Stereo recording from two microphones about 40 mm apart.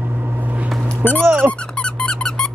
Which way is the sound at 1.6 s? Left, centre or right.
Left.